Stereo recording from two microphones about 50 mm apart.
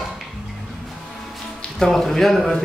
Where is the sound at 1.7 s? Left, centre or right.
Centre.